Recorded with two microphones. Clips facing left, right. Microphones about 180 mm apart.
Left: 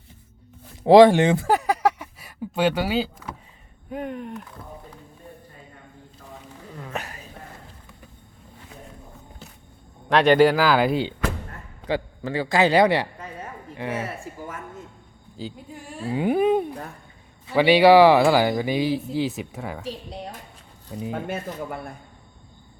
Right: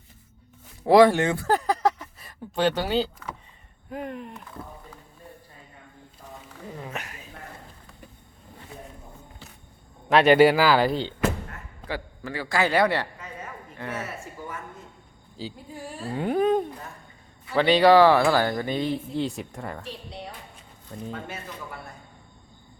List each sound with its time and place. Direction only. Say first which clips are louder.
0.9 s a man's voice: left 4 dB; 20° left (ahead or behind)
1.5 s a sound: left 2 dB; 10° left (ahead or behind)
3.8 s speech: left 3 dB; centre (ahead or behind)
6.9 s a sound: left 4 dB; 35° left (ahead or behind)
10.1 s speech: even; 5° right (ahead or behind)
11.9 s a man's voice: left 7 dB; 25° left (ahead or behind); by 19.8 s 5° left (ahead or behind)
19.9 s speech: left 4 dB; 45° left (ahead or behind)
21.1 s speech: left 8 dB; 55° left (ahead or behind)